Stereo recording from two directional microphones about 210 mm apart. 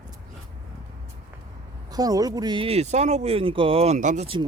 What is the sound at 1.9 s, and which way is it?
Speech, 15° right (ahead or behind).